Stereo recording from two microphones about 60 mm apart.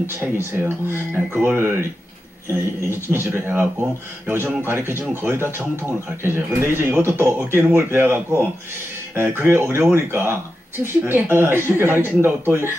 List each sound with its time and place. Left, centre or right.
0.0 s speech: right
2.9 s speech: right